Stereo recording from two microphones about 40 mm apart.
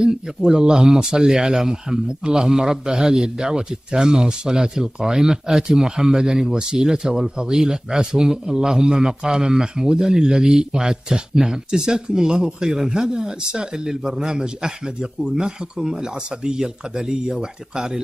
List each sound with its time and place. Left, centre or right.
0.0 s speech: centre